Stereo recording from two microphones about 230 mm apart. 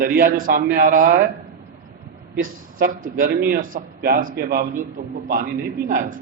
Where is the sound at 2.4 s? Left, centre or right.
Right.